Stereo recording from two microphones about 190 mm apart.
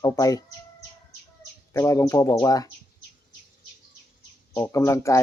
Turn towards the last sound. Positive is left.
turn(degrees=15)  # may be behind; listen again after turning